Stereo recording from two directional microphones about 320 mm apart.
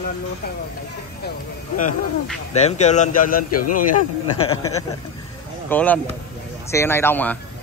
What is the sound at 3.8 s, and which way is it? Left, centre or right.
Speech, left.